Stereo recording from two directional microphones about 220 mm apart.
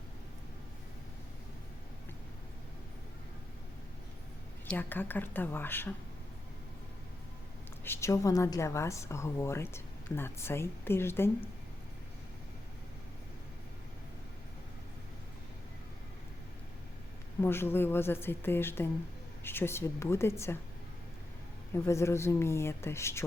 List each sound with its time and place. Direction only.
4.6 s a woman's voice: 10° left (ahead or behind)
7.9 s a woman's voice: 15° left (ahead or behind)
17.4 s a woman's voice: 10° left (ahead or behind)
21.7 s a woman's voice: 10° left (ahead or behind)